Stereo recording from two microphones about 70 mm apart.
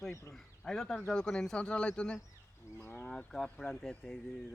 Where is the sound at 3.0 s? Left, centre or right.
Centre.